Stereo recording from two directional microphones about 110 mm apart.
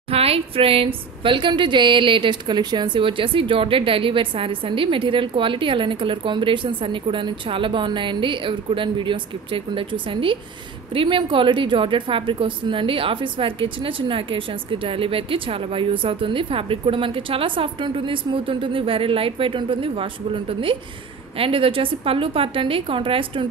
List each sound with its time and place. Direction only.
0.1 s a woman's voice: 65° right (ahead or behind)